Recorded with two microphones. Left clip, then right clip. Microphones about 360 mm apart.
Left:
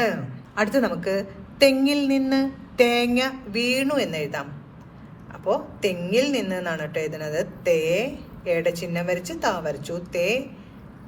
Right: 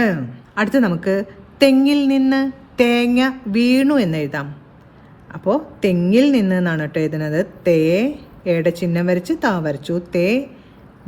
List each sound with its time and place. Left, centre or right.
0.0 s a man's voice: right